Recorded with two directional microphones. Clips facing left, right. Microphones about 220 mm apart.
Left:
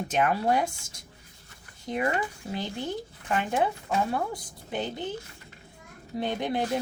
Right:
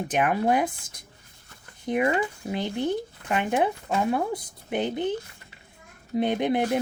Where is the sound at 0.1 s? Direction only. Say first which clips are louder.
Right 2 dB; 20° right (ahead or behind).